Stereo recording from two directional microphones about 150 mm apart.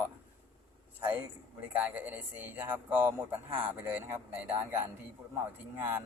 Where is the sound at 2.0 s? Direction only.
10° right (ahead or behind).